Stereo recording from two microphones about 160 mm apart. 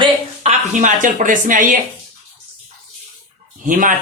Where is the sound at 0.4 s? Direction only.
50° right (ahead or behind).